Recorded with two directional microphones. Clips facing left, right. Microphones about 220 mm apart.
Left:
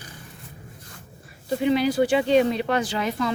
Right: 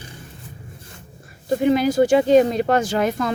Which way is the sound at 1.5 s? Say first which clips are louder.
Right 4 dB; 45° right (ahead or behind).